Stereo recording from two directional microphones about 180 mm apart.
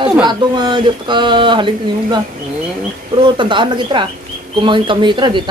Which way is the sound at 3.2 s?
25° right (ahead or behind).